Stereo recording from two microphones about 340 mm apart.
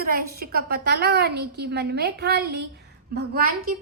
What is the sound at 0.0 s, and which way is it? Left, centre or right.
A woman's voice, right.